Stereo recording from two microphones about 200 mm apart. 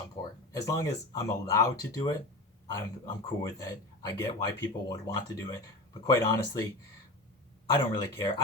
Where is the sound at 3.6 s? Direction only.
20° left (ahead or behind).